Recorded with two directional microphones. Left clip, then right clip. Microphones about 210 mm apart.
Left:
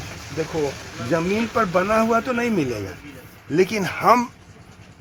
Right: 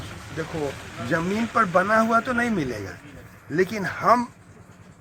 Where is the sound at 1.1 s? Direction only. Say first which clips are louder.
Left 2 dB; 30° left (ahead or behind).